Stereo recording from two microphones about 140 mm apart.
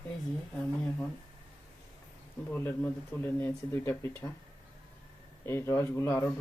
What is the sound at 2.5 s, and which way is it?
Speech, 15° left (ahead or behind).